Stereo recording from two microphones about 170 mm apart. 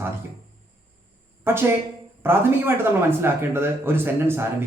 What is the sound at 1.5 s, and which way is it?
Speech, 15° right (ahead or behind).